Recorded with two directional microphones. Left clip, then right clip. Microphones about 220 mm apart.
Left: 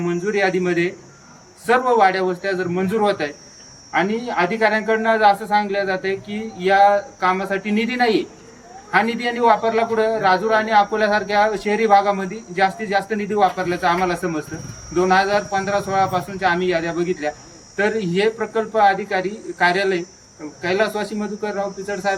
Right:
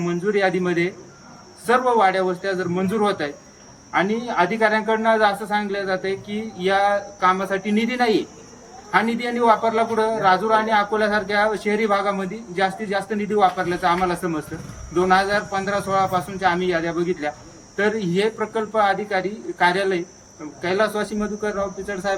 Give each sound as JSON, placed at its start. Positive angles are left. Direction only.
{"t": 0.0, "sound": "a man's voice", "side_deg": 0}